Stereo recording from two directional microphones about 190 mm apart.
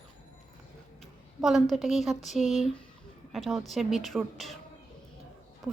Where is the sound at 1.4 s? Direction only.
Centre (ahead or behind).